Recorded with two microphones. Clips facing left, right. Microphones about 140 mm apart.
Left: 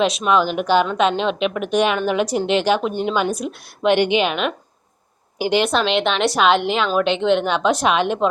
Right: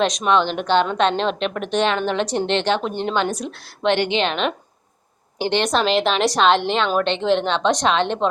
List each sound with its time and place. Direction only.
0.3 s a woman's voice: 5° left (ahead or behind)